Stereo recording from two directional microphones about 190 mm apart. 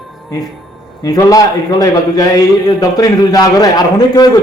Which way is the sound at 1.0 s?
20° left (ahead or behind).